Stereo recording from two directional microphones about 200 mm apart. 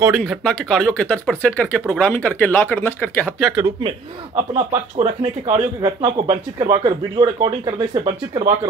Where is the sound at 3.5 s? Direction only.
20° right (ahead or behind).